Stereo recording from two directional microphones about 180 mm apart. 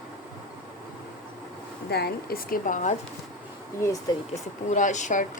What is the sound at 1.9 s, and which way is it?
A woman's voice, 60° left (ahead or behind).